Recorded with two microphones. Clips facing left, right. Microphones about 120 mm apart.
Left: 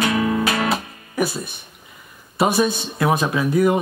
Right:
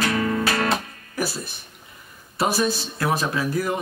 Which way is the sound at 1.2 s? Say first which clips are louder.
Left 5 dB; centre (ahead or behind).